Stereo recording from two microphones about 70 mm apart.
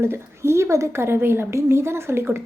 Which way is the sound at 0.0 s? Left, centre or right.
Right.